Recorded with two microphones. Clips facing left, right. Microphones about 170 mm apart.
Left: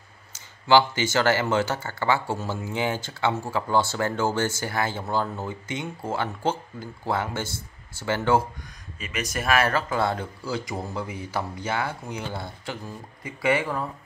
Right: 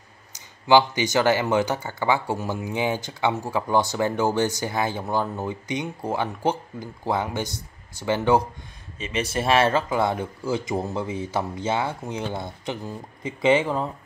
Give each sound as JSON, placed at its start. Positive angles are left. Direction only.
{"t": 0.3, "sound": "speech", "side_deg": -15}
{"t": 9.0, "sound": "speech", "side_deg": -30}